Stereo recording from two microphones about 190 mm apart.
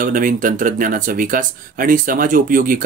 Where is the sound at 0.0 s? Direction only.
45° right (ahead or behind).